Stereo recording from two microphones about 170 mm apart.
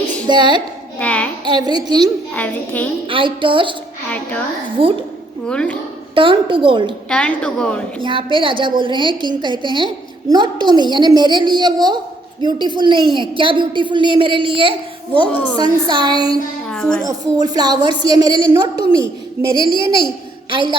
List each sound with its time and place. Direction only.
0.3 s a woman's voice: 25° right (ahead or behind)
0.9 s a woman's voice: 5° left (ahead or behind)
1.5 s a woman's voice: 25° right (ahead or behind)
2.3 s a woman's voice: 10° left (ahead or behind)
3.1 s a woman's voice: 30° right (ahead or behind)
4.8 s a woman's voice: 30° right (ahead or behind)
5.5 s a woman's voice: 5° left (ahead or behind)
6.1 s a woman's voice: 30° right (ahead or behind)
7.1 s a woman's voice: 5° left (ahead or behind)
8.0 s a woman's voice: 30° right (ahead or behind)
16.6 s a child's voice: 5° left (ahead or behind)
17.1 s a woman's voice: 20° right (ahead or behind)
19.5 s a child's voice: 30° left (ahead or behind)
20.5 s a woman's voice: 30° right (ahead or behind)